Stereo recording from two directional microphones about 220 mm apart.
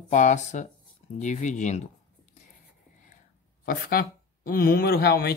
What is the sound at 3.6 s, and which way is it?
Speech, 40° left (ahead or behind).